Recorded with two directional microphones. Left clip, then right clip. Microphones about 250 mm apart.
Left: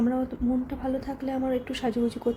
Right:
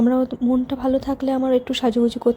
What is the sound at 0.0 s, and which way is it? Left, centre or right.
A woman's voice, right.